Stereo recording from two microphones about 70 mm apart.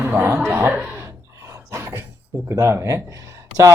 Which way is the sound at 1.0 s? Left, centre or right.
Right.